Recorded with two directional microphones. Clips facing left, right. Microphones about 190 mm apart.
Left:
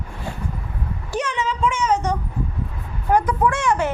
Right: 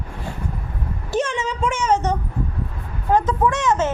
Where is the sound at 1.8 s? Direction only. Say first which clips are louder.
Right 1 dB; 25° right (ahead or behind).